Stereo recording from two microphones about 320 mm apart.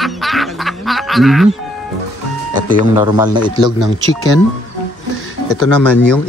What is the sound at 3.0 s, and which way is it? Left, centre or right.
Speech, centre.